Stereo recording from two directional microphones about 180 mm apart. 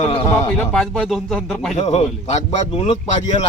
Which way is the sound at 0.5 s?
Centre (ahead or behind).